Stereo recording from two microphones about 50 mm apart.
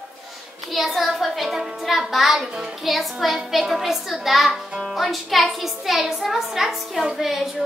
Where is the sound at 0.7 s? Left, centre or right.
Centre.